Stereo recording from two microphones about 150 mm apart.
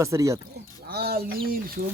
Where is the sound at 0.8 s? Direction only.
90° right.